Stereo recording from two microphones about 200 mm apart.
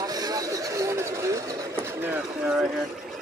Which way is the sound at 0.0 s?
20° right (ahead or behind).